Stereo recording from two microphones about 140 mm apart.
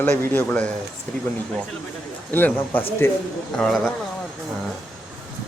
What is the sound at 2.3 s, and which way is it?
Speech, 15° left (ahead or behind).